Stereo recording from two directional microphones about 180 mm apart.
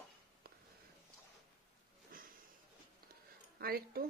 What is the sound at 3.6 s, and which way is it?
Speech, 55° right (ahead or behind).